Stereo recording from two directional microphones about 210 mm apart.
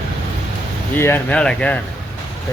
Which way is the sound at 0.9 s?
10° left (ahead or behind).